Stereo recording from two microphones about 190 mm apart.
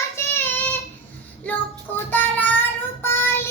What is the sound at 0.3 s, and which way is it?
Child singing, 10° left (ahead or behind).